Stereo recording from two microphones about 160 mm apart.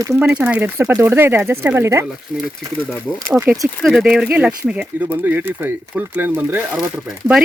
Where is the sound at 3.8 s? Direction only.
Centre (ahead or behind).